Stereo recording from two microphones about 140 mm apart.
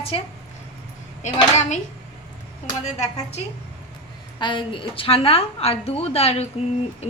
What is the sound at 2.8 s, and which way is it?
Speech, 50° left (ahead or behind).